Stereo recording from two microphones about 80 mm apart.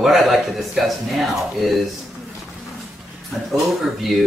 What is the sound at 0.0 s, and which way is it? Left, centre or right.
Speech, centre.